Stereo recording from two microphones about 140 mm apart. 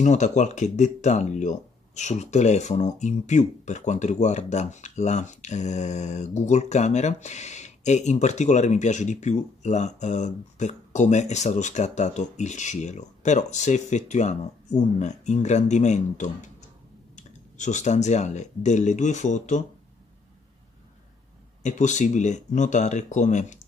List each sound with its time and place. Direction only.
0.0 s speech: 55° left (ahead or behind)
21.6 s speech: 60° left (ahead or behind)